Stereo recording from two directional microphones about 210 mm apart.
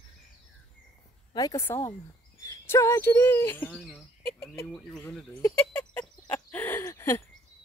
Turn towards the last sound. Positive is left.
turn(degrees=15)  # may be behind; listen again after turning